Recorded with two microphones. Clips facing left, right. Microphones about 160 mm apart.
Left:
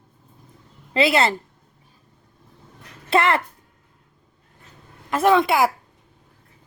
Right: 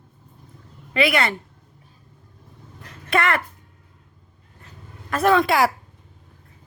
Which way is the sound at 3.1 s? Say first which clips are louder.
Left 3 dB; 25° left (ahead or behind).